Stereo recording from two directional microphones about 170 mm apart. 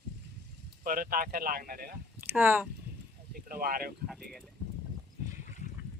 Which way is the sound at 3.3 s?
60° right (ahead or behind).